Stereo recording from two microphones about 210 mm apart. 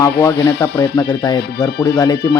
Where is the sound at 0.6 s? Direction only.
15° left (ahead or behind).